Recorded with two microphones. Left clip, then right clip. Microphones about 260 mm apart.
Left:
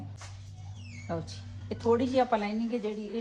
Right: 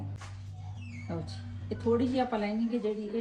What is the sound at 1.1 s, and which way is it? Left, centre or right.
A woman's voice, left.